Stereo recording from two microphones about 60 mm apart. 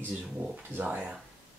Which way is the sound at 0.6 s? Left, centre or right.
Right.